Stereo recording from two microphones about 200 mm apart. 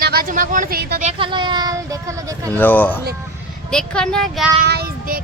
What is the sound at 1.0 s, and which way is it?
Speech, 25° right (ahead or behind).